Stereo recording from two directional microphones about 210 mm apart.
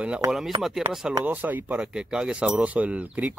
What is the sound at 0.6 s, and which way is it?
Speech, centre (ahead or behind).